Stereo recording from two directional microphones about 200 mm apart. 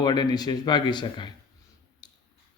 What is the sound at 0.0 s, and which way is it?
Mantra, 20° left (ahead or behind).